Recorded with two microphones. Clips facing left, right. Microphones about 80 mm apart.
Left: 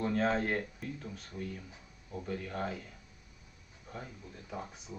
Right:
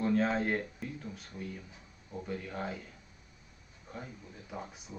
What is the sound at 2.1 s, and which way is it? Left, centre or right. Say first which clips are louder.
Speech: left 1 dB; centre.